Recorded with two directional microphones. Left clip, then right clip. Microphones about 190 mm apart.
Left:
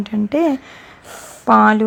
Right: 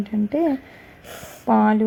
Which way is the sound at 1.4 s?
10° left (ahead or behind).